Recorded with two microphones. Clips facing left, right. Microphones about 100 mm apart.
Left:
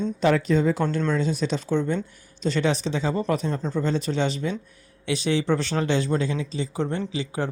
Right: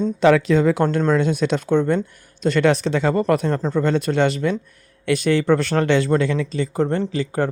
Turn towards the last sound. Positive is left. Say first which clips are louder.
# right 6 dB
turn(degrees=-50)  # may be behind; listen again after turning